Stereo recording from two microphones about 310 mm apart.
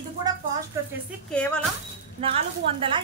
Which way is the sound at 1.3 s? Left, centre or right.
Centre.